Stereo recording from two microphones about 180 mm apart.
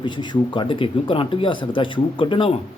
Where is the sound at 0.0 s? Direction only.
25° left (ahead or behind).